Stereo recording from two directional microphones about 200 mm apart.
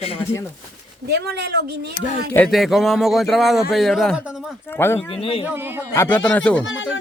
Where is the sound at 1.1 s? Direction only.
55° right (ahead or behind).